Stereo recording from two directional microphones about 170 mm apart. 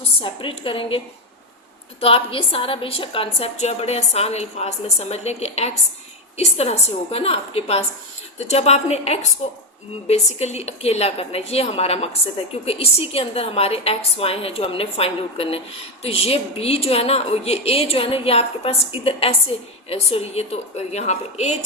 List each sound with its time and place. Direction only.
0.2 s a woman's voice: 30° left (ahead or behind)